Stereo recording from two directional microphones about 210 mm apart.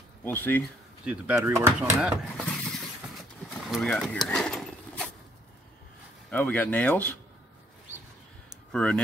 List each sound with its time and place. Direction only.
0.2 s speech: 10° left (ahead or behind)
1.0 s speech: 5° right (ahead or behind)
3.6 s vehicle: centre (ahead or behind)
6.3 s speech: 10° left (ahead or behind)
8.7 s speech: 5° left (ahead or behind)